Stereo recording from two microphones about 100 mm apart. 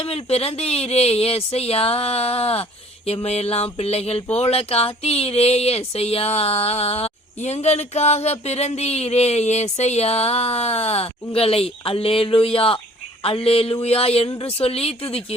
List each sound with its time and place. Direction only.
0.0 s speech: 80° left
11.3 s speech: 75° left (ahead or behind)